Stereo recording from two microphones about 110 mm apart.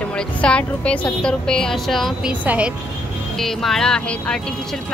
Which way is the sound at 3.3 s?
Centre (ahead or behind).